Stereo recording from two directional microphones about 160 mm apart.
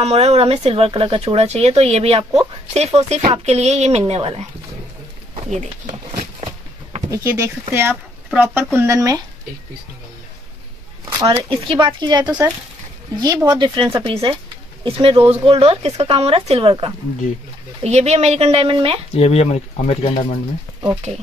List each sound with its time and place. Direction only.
0.0 s speech: 40° right (ahead or behind)
7.1 s a woman's voice: 15° right (ahead or behind)
11.2 s a woman's voice: 35° right (ahead or behind)
17.8 s speech: 45° right (ahead or behind)
19.1 s speech: 40° left (ahead or behind)